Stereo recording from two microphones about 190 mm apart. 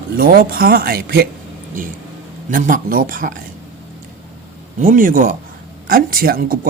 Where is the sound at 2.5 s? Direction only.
45° right (ahead or behind).